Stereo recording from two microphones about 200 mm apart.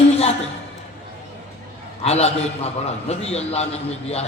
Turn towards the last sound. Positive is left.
turn(degrees=30)  # may be behind; listen again after turning